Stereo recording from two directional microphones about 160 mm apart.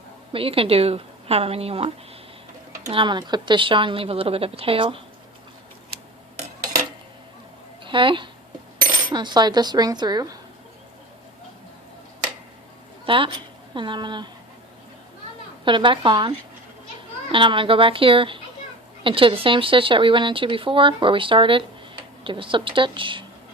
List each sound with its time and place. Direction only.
0.3 s speech: 35° right (ahead or behind)
2.9 s speech: 30° right (ahead or behind)
7.9 s speech: 30° right (ahead or behind)
13.1 s speech: 35° right (ahead or behind)
15.6 s speech: 30° right (ahead or behind)
17.3 s speech: 30° right (ahead or behind)